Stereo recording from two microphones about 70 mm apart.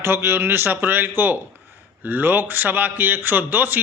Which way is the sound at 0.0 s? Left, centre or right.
Right.